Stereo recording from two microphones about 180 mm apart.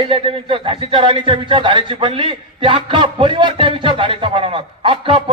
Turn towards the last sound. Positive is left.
turn(degrees=-30)  # may be behind; listen again after turning